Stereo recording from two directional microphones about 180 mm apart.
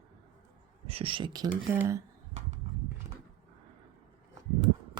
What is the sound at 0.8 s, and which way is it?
Speech, 30° right (ahead or behind).